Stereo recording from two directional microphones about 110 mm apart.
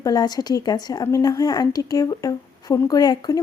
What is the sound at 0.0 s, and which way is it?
A woman's voice, 35° left (ahead or behind).